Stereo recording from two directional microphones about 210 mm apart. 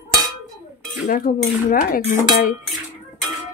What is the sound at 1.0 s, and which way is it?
Speech, 40° left (ahead or behind).